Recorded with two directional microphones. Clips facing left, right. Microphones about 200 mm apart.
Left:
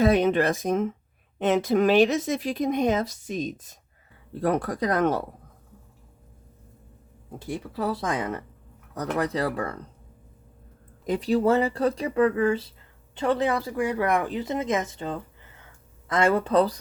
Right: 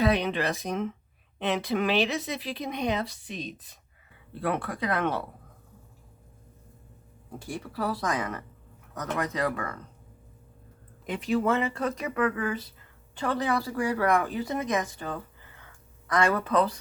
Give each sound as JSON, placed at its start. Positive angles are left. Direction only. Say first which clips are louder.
{"t": 0.0, "sound": "speech", "louder": "left 5 dB", "side_deg": 45}
{"t": 7.3, "sound": "speech", "louder": "left 3 dB", "side_deg": 20}
{"t": 11.0, "sound": "speech", "louder": "left 4 dB", "side_deg": 35}